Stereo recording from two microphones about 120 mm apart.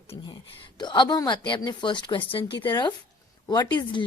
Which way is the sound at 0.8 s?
40° left (ahead or behind).